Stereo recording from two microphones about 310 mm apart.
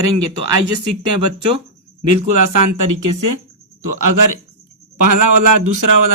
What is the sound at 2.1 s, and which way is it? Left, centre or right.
Speech, right.